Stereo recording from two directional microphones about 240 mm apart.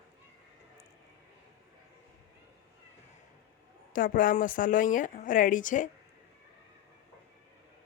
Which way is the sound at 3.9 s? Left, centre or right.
Left.